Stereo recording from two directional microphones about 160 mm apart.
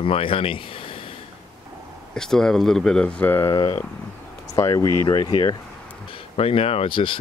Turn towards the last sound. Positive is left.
turn(degrees=30)  # may be behind; listen again after turning